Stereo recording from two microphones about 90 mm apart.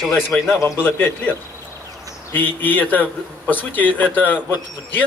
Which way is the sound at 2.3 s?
20° left (ahead or behind).